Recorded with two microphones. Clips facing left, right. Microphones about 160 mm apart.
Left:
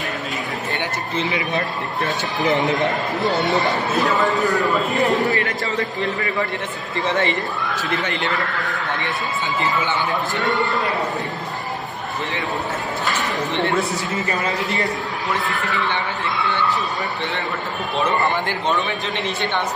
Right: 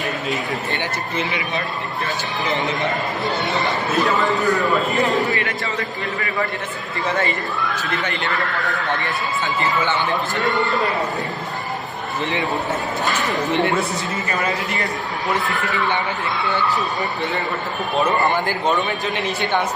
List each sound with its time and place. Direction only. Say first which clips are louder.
3.2 s a man's voice: left 3 dB; centre (ahead or behind)
7.1 s speech: left 1 dB; 20° left (ahead or behind)
15.3 s a man's voice: right 2 dB; centre (ahead or behind)
18.2 s a man's voice: right 2 dB; centre (ahead or behind)